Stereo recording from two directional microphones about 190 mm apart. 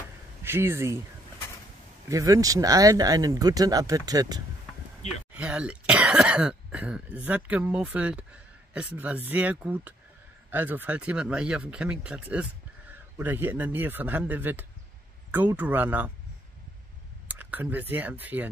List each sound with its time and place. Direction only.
0.4 s speech: 15° right (ahead or behind)
2.0 s speech: 15° right (ahead or behind)
5.3 s speech: 5° right (ahead or behind)
17.3 s speech: 10° right (ahead or behind)